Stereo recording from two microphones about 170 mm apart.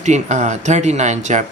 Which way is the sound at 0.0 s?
45° right (ahead or behind).